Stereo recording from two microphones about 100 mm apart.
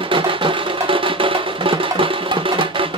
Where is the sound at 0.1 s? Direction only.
60° right (ahead or behind).